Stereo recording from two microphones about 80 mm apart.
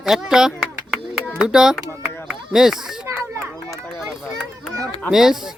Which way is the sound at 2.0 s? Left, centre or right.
Centre.